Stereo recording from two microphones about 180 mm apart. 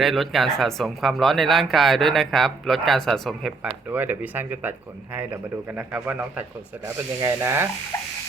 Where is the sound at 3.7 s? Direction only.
10° right (ahead or behind).